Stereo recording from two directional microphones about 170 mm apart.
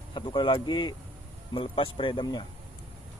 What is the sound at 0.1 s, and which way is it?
Speech, 25° left (ahead or behind).